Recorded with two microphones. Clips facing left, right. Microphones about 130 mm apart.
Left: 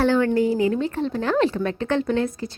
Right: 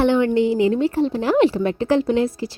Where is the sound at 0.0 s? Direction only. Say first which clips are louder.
Right 2 dB; 20° right (ahead or behind).